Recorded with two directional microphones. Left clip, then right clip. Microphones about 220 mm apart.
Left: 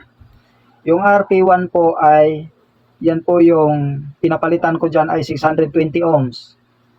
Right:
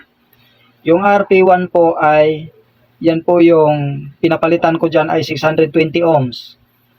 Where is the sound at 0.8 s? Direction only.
15° right (ahead or behind).